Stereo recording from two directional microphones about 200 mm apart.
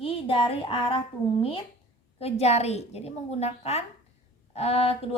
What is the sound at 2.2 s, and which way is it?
A woman's voice, 30° left (ahead or behind).